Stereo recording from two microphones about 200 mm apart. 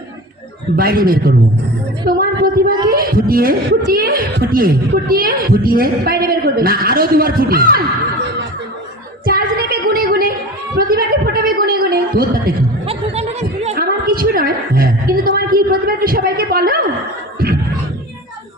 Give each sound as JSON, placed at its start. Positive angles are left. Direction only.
{"t": 0.8, "sound": "speech", "side_deg": -45}
{"t": 9.2, "sound": "music", "side_deg": -50}
{"t": 10.8, "sound": "gargling", "side_deg": -45}
{"t": 12.9, "sound": "chatter", "side_deg": -30}
{"t": 13.7, "sound": "a sound", "side_deg": -45}